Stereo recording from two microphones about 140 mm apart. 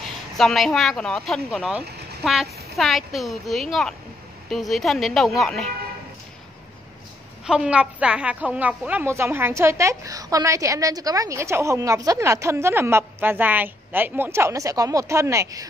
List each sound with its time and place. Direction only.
0.4 s speech: centre (ahead or behind)
7.4 s speech: 5° right (ahead or behind); by 15.6 s 20° right (ahead or behind)